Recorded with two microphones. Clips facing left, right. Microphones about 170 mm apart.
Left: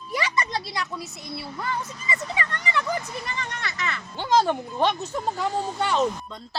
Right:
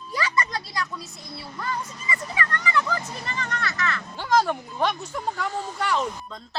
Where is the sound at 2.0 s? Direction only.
20° left (ahead or behind).